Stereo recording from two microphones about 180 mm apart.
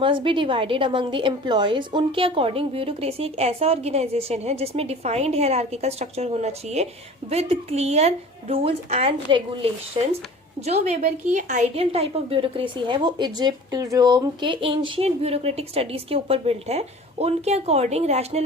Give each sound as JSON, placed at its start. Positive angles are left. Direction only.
{"t": 0.0, "sound": "a woman's voice", "side_deg": -30}